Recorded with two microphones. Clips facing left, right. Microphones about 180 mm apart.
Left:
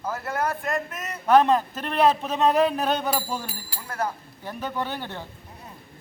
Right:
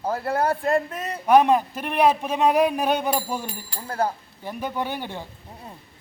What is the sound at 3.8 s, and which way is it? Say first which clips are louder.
Speech: right 4 dB; 30° right (ahead or behind).